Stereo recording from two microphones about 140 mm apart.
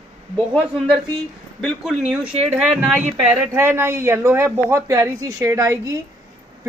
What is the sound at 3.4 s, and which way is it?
A man's voice, 15° right (ahead or behind).